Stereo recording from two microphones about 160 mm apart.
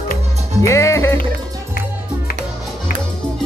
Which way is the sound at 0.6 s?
20° left (ahead or behind).